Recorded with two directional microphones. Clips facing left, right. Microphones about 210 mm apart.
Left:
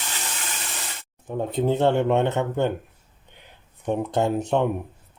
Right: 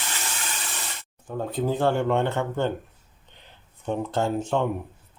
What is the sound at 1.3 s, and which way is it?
Speech, 20° left (ahead or behind).